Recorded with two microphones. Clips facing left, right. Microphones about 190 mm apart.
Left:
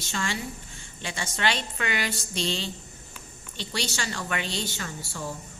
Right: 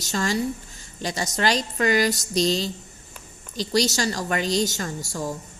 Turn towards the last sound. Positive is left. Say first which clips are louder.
# right 6 dB
turn(degrees=-40)  # may be behind; listen again after turning